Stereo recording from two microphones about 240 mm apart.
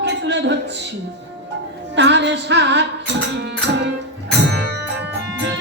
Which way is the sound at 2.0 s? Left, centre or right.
Right.